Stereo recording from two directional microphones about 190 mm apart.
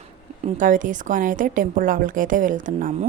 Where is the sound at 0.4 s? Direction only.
45° right (ahead or behind).